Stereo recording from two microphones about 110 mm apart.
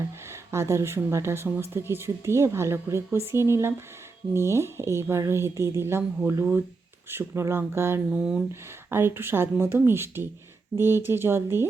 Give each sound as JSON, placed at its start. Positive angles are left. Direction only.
{"t": 0.3, "sound": "speech", "side_deg": -25}
{"t": 8.1, "sound": "speech", "side_deg": -5}
{"t": 8.9, "sound": "speech", "side_deg": -20}